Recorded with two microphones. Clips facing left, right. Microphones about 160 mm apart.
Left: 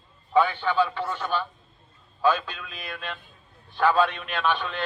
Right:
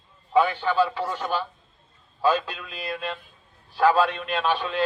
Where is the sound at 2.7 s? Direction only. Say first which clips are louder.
Right 7 dB; 35° right (ahead or behind).